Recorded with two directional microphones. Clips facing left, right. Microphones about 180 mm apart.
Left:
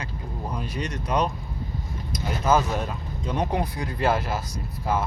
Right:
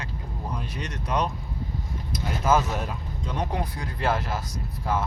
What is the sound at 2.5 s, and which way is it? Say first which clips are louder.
Speech: left 1 dB; 5° right (ahead or behind).